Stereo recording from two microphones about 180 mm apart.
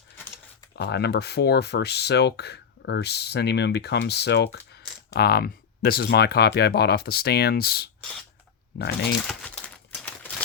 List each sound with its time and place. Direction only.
0.8 s speech: 70° left (ahead or behind)
9.2 s crumpling: 5° left (ahead or behind)